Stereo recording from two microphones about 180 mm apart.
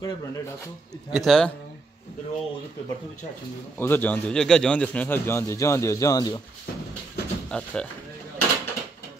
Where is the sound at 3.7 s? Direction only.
10° left (ahead or behind).